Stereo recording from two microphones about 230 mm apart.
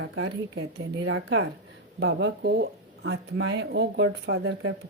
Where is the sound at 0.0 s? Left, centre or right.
Right.